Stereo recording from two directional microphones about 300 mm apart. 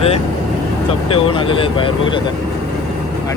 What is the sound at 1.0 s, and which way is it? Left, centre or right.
Speech, centre.